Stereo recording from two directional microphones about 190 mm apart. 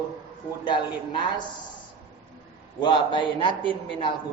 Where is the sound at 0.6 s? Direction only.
25° left (ahead or behind).